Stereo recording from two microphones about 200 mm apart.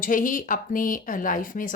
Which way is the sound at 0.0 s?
40° left (ahead or behind).